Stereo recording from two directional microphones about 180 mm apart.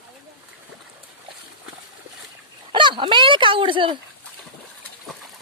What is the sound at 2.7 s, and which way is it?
Speech, 25° right (ahead or behind).